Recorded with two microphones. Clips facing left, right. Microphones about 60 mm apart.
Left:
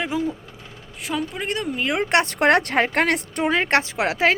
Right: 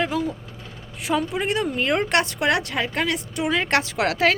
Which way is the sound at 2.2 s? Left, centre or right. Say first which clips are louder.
Left 4 dB; left.